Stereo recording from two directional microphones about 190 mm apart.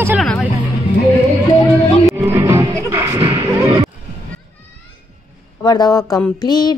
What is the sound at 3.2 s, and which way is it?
Neigh, 30° right (ahead or behind).